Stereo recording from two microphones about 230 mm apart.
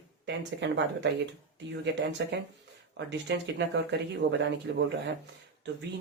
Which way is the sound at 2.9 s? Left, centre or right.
Right.